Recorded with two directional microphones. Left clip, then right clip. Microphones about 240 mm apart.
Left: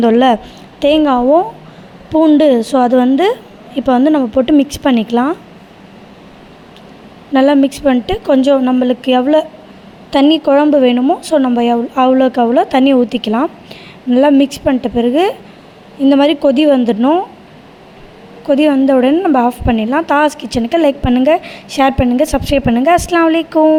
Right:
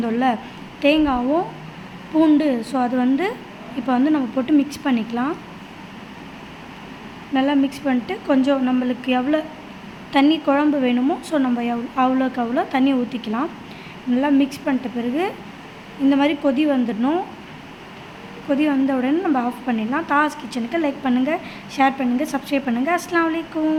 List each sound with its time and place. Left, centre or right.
0.0 s a woman's voice: left
7.3 s a woman's voice: left
18.4 s a woman's voice: left